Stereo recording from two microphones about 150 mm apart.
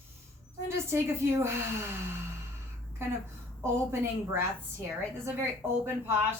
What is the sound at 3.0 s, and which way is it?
A woman's voice, 15° right (ahead or behind).